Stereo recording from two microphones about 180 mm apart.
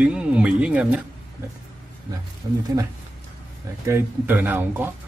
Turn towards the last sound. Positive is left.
turn(degrees=-10)  # may be behind; listen again after turning